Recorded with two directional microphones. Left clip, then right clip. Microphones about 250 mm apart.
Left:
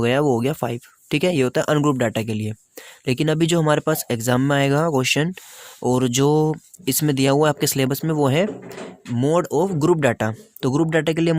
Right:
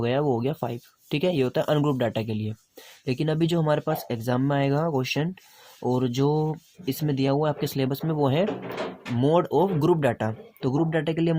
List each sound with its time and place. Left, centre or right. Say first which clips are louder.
0.0 s speech: left 6 dB; left